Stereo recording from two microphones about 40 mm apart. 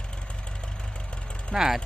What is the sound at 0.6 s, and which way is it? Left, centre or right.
Vehicle, left.